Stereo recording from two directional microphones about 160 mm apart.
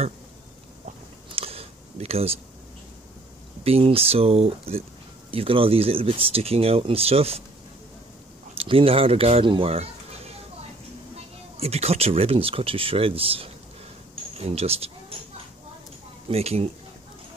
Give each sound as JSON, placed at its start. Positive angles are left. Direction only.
{"t": 1.3, "sound": "a sound", "side_deg": -35}
{"t": 3.6, "sound": "speech", "side_deg": -40}
{"t": 8.5, "sound": "speech", "side_deg": -35}
{"t": 11.5, "sound": "speech", "side_deg": -40}
{"t": 16.3, "sound": "speech", "side_deg": -40}